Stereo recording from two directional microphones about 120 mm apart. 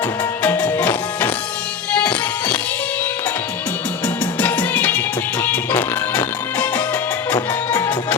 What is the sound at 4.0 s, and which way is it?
Music, 15° left (ahead or behind).